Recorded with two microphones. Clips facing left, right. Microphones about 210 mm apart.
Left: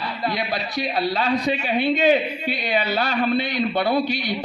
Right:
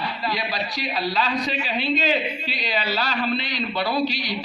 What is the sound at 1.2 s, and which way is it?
A man's voice, 55° left (ahead or behind).